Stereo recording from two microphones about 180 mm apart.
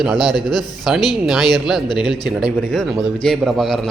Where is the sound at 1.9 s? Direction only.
25° left (ahead or behind).